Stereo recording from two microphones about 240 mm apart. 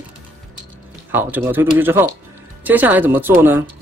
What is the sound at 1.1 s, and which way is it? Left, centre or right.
Speech, centre.